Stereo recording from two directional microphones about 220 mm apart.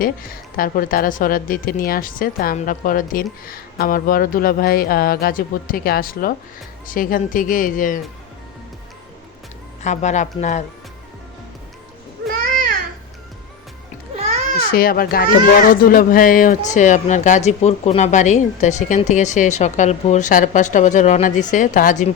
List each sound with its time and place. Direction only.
0.0 s speech: 40° left (ahead or behind)
9.8 s speech: 30° left (ahead or behind)
14.7 s a child's voice: 40° left (ahead or behind)